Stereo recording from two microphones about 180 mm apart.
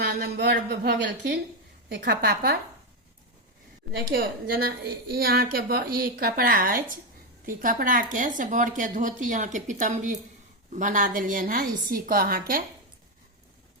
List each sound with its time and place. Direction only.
0.0 s a woman's voice: 65° right (ahead or behind)
3.9 s a woman's voice: 55° right (ahead or behind)